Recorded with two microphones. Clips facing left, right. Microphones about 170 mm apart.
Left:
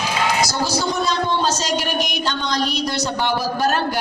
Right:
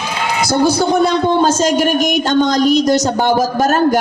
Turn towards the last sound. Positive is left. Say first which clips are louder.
# right 7 dB
turn(degrees=-45)  # may be behind; listen again after turning